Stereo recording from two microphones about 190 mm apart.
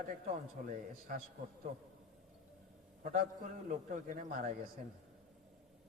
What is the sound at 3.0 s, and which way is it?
A man's voice, 50° right (ahead or behind).